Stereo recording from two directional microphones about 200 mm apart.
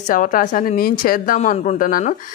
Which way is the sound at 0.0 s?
40° left (ahead or behind).